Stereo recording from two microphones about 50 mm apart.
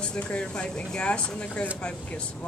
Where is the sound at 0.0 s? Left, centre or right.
Left.